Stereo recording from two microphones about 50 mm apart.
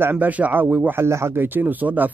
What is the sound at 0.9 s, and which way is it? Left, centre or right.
Speech, right.